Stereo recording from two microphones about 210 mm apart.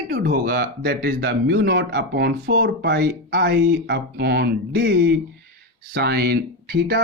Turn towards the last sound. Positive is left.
turn(degrees=-50)  # may be behind; listen again after turning